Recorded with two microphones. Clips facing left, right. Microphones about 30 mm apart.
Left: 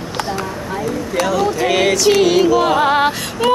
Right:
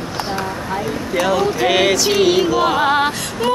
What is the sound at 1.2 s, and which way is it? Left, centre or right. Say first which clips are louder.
Music: right 1 dB; centre.